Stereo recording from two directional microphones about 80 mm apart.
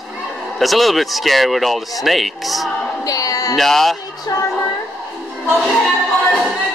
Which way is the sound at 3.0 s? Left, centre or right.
Left.